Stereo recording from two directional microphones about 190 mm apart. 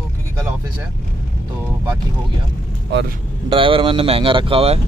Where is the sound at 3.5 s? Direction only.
30° right (ahead or behind).